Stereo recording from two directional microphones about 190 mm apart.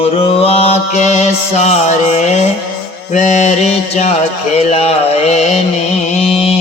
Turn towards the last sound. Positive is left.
turn(degrees=30)  # may be behind; listen again after turning